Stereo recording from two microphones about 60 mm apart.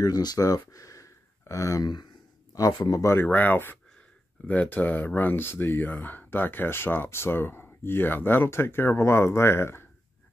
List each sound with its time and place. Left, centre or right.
0.0 s speech: left
2.5 s speech: left
3.3 s speech: left